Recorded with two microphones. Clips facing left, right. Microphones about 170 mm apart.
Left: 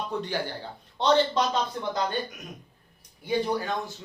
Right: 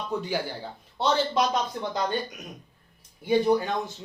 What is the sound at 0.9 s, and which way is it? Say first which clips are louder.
Speech: left 2 dB; 5° right (ahead or behind).